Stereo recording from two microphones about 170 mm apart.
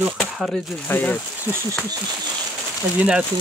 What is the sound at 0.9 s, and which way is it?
Speech, 10° left (ahead or behind).